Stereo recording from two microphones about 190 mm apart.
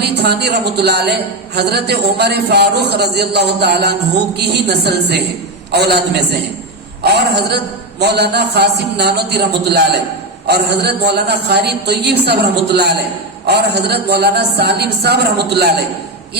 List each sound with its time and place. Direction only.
0.0 s a woman's voice: 60° right (ahead or behind)